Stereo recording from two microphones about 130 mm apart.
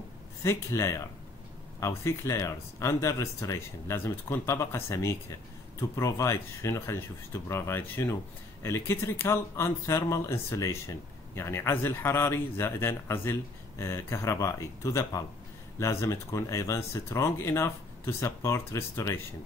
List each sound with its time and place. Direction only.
0.4 s speech: 20° left (ahead or behind)